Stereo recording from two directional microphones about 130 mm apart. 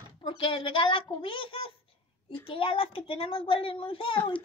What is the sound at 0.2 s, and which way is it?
A woman's voice, 35° left (ahead or behind).